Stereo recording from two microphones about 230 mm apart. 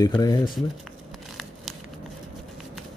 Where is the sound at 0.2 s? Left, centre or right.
Centre.